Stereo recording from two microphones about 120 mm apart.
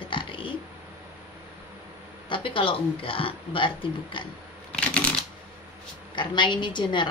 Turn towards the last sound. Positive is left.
turn(degrees=40)  # may be behind; listen again after turning